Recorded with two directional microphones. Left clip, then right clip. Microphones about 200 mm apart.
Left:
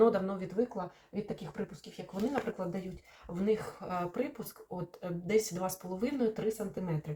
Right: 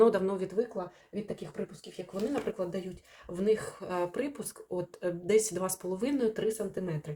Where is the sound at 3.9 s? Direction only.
45° right (ahead or behind).